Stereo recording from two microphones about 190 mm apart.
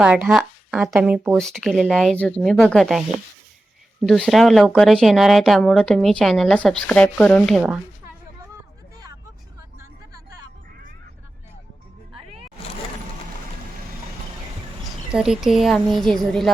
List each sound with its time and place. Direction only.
0.0 s speech: 5° right (ahead or behind)
4.0 s speech: centre (ahead or behind)
9.7 s vehicle: 20° right (ahead or behind)
15.1 s speech: 5° right (ahead or behind)